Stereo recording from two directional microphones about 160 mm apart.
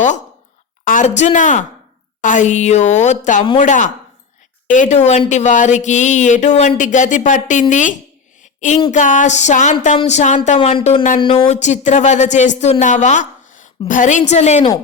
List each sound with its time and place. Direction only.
0.9 s speech: 50° left (ahead or behind)
2.2 s a sound: 50° left (ahead or behind)
12.5 s a woman's voice: 45° left (ahead or behind)